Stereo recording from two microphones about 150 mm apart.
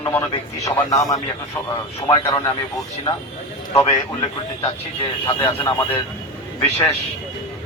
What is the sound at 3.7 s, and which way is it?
A man's voice, 20° left (ahead or behind).